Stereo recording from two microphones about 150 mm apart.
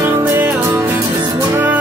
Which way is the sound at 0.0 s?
15° right (ahead or behind).